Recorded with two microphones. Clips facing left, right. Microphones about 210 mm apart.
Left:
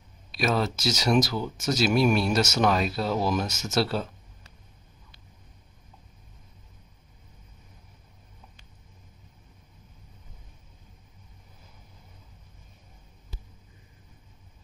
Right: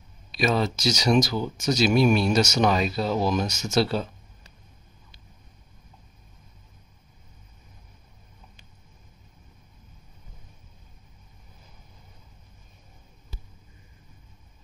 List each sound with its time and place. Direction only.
0.3 s speech: 5° left (ahead or behind)